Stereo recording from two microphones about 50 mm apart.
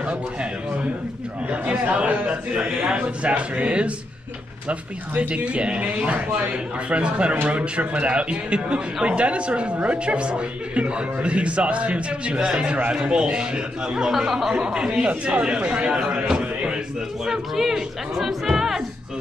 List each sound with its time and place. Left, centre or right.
1.5 s a man's voice: right
5.3 s a man's voice: right
16.3 s a sound: centre
17.2 s a man's voice: centre